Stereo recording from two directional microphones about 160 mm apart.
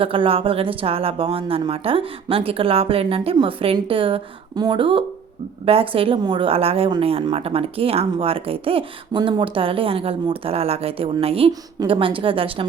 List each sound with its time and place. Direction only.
0.0 s a woman's voice: 35° right (ahead or behind)